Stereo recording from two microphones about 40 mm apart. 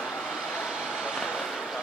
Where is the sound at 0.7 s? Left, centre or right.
Centre.